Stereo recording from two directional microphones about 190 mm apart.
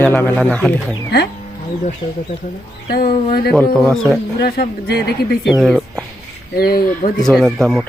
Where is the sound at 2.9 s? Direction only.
55° left (ahead or behind).